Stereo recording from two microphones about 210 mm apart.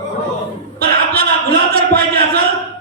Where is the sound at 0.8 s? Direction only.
45° right (ahead or behind).